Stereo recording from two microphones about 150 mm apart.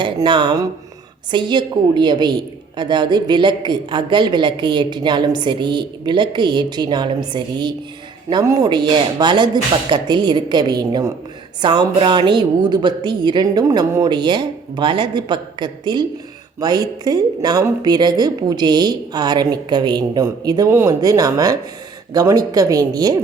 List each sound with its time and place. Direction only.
0.0 s a woman's voice: 30° right (ahead or behind)